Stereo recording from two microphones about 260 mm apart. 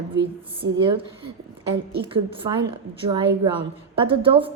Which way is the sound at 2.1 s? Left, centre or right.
Centre.